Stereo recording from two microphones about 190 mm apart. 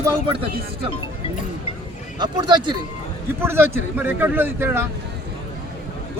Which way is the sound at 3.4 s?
10° right (ahead or behind).